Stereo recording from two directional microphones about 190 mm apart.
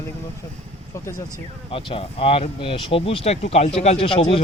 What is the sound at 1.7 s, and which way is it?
Speech, 30° left (ahead or behind).